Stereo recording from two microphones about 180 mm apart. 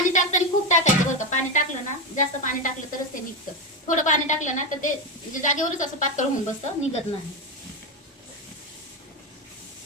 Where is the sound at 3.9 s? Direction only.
45° left (ahead or behind).